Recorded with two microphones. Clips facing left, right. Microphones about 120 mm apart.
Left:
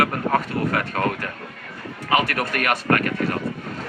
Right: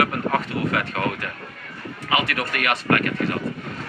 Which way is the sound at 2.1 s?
45° left (ahead or behind).